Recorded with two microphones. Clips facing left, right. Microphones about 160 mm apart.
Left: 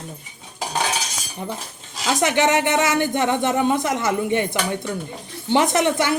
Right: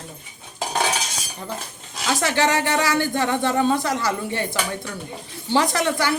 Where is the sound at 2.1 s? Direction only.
20° left (ahead or behind).